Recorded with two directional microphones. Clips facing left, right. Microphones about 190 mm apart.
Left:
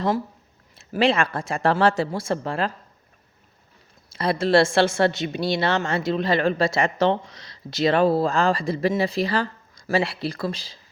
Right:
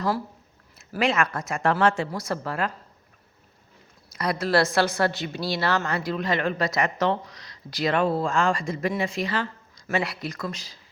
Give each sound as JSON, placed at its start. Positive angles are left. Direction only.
{"t": 0.8, "sound": "a woman's voice", "side_deg": 30}
{"t": 4.1, "sound": "a woman's voice", "side_deg": 30}